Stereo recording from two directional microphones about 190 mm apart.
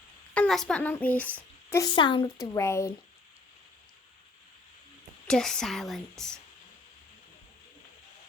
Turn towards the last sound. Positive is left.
turn(degrees=5)  # may be behind; listen again after turning